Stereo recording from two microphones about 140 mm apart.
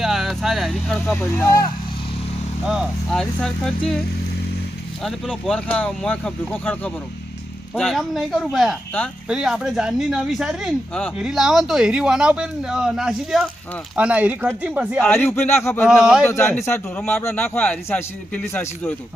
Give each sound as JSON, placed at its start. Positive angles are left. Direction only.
{"t": 0.0, "sound": "a sound", "side_deg": 0}
{"t": 1.1, "sound": "speech", "side_deg": 15}
{"t": 2.6, "sound": "speech", "side_deg": 0}
{"t": 5.0, "sound": "speech", "side_deg": 5}
{"t": 15.1, "sound": "speech", "side_deg": 15}
{"t": 15.9, "sound": "speech", "side_deg": 0}
{"t": 16.3, "sound": "speech", "side_deg": 20}